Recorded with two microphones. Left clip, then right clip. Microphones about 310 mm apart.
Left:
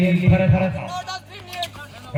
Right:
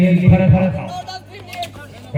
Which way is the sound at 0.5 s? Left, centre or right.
Centre.